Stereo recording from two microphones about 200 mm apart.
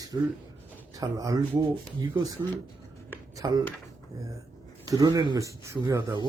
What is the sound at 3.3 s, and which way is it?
Speech, 15° right (ahead or behind).